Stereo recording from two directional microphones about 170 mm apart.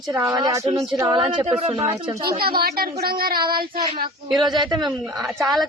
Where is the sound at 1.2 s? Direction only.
35° right (ahead or behind).